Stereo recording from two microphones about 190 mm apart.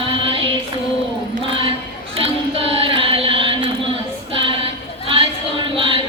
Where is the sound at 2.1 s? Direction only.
30° right (ahead or behind).